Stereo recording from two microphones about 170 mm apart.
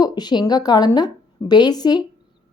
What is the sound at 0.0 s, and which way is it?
A woman's voice, 25° left (ahead or behind).